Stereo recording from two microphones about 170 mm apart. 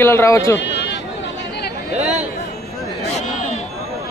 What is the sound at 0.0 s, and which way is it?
Speech, 15° left (ahead or behind).